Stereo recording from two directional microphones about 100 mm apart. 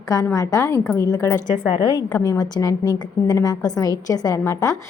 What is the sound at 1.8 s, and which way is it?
A woman's voice, 40° left (ahead or behind).